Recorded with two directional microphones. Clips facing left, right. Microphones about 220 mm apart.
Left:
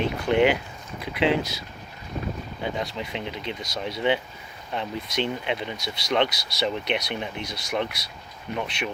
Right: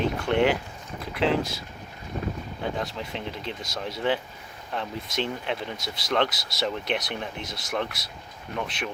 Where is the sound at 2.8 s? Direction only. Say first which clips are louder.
Left 1 dB; centre (ahead or behind).